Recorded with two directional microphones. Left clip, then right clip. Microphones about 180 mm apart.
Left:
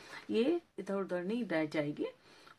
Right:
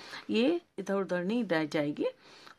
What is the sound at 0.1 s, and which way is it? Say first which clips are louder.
Speech: right 3 dB; 55° right (ahead or behind).